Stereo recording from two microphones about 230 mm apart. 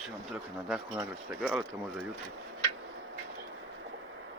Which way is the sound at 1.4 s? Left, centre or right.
Centre.